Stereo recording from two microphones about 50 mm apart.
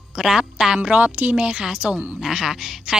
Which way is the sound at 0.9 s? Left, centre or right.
Right.